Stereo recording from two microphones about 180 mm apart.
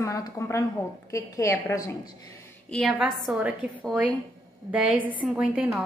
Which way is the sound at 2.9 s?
5° right (ahead or behind).